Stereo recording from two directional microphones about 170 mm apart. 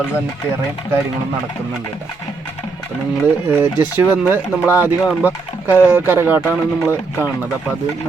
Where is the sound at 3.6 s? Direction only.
10° right (ahead or behind).